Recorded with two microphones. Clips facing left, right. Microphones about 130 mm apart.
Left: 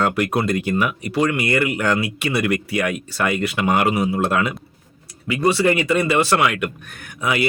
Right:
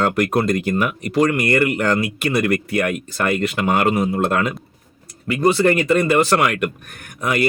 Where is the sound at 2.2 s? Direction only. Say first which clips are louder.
Right 2 dB; 40° right (ahead or behind).